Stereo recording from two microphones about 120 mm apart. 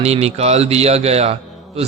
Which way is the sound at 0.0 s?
60° right (ahead or behind).